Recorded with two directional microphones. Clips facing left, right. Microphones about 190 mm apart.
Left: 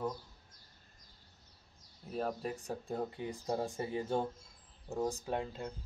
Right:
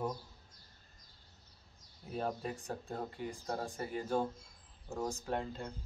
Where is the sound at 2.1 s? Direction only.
Centre (ahead or behind).